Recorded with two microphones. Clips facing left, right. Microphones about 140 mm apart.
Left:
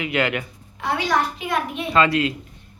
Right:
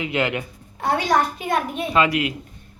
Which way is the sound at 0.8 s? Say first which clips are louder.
Right 2 dB; 40° right (ahead or behind).